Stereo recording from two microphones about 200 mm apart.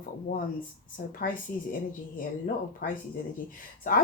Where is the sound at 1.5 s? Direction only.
45° left (ahead or behind).